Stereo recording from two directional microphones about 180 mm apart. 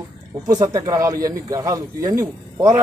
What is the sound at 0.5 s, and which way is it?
A man's voice, 20° right (ahead or behind).